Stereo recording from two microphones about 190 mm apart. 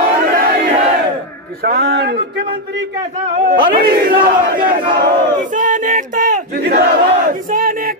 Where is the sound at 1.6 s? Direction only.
55° right (ahead or behind).